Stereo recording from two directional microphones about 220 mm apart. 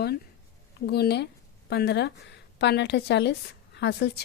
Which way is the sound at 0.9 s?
50° left (ahead or behind).